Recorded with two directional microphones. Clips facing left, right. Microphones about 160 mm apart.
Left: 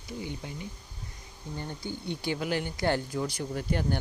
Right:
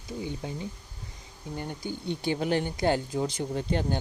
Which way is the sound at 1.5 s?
15° right (ahead or behind).